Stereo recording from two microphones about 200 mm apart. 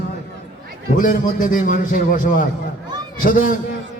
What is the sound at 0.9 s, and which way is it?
A man's voice, 45° left (ahead or behind).